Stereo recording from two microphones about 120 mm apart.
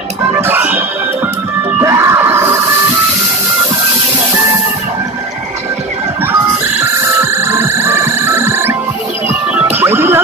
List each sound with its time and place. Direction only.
0.4 s music: 15° right (ahead or behind)
6.8 s music: 20° right (ahead or behind)
9.8 s music: 20° right (ahead or behind)